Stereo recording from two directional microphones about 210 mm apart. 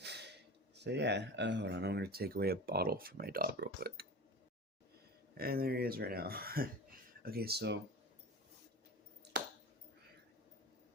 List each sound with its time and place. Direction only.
0.0 s a sound: 55° right (ahead or behind)
0.8 s speech: 55° right (ahead or behind)
5.4 s speech: 45° right (ahead or behind)